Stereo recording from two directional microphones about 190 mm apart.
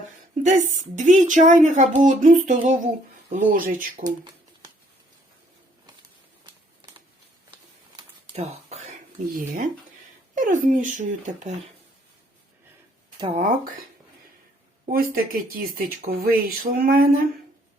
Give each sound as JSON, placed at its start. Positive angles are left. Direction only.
{"t": 0.4, "sound": "speech", "side_deg": -40}
{"t": 4.0, "sound": "a sound", "side_deg": -20}
{"t": 7.9, "sound": "a sound", "side_deg": -30}
{"t": 10.3, "sound": "speech", "side_deg": -45}
{"t": 13.1, "sound": "speech", "side_deg": -25}
{"t": 14.8, "sound": "speech", "side_deg": -50}